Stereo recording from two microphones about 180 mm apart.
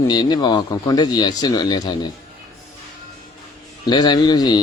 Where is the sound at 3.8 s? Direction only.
25° left (ahead or behind).